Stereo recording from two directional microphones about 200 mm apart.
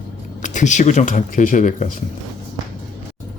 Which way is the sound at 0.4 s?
40° left (ahead or behind).